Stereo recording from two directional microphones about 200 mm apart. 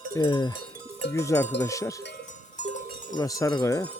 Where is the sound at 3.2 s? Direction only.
15° left (ahead or behind).